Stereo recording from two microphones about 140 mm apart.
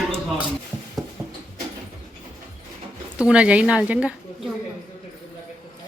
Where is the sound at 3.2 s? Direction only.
5° right (ahead or behind).